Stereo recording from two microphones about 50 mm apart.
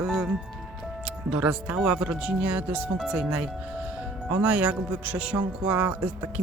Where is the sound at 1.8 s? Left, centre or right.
Centre.